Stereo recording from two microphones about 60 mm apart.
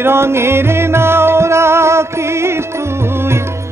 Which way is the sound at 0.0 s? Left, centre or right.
Right.